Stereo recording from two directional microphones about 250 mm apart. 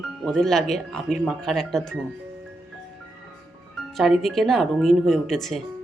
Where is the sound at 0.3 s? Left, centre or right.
Centre.